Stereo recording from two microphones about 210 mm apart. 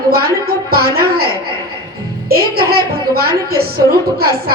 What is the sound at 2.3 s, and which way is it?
A woman's voice, 45° right (ahead or behind).